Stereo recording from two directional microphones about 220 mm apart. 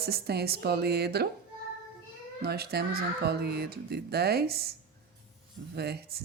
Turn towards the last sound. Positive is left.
turn(degrees=-45)  # may be behind; listen again after turning